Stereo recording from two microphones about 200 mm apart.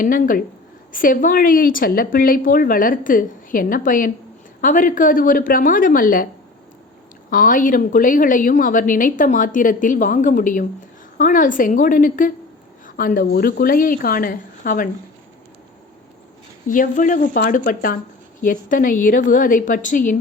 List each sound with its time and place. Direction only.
0.0 s a woman's voice: 45° left (ahead or behind)
7.3 s a woman's voice: 40° left (ahead or behind)
16.6 s a woman's voice: 40° left (ahead or behind)